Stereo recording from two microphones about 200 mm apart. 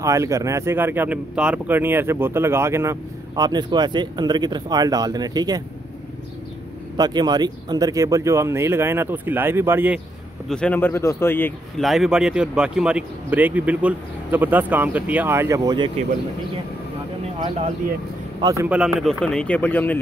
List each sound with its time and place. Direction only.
0.0 s speech: 15° right (ahead or behind)
7.0 s speech: 20° right (ahead or behind)
10.5 s speech: 5° left (ahead or behind)
11.8 s speech: centre (ahead or behind); by 15.9 s 20° right (ahead or behind)
18.4 s speech: 15° right (ahead or behind)
18.8 s speech: centre (ahead or behind)